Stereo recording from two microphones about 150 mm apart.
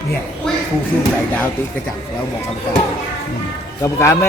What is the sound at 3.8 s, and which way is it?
Speech, 20° left (ahead or behind).